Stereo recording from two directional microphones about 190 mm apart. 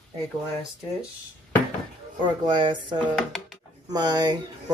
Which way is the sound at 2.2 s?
25° right (ahead or behind).